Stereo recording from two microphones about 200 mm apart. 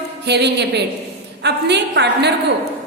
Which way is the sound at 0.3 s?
60° right (ahead or behind).